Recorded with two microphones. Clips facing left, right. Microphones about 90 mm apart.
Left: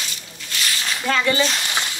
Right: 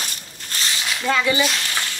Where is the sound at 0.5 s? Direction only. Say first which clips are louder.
Even; 40° right (ahead or behind).